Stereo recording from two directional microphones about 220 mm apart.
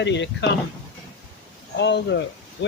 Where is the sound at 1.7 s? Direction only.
50° left (ahead or behind).